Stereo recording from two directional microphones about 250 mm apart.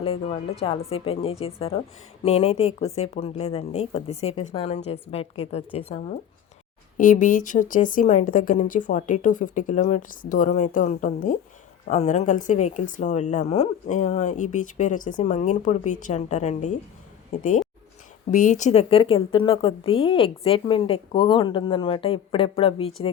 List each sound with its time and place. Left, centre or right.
0.0 s a woman's voice: left
18.3 s a woman's voice: left